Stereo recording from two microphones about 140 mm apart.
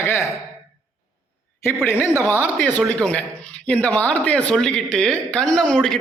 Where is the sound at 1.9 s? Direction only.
15° left (ahead or behind).